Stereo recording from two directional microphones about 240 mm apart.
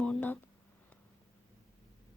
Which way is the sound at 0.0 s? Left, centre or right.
Centre.